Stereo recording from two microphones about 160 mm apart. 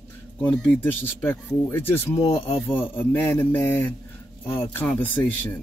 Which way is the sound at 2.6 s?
10° left (ahead or behind).